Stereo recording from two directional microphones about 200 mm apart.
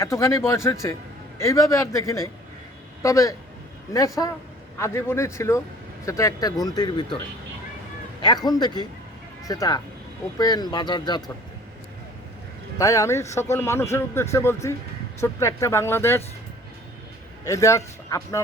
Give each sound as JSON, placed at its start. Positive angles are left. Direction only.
{"t": 0.0, "sound": "a man's voice", "side_deg": 15}
{"t": 8.2, "sound": "a man's voice", "side_deg": 20}
{"t": 12.8, "sound": "a man's voice", "side_deg": 15}
{"t": 17.4, "sound": "a man's voice", "side_deg": 15}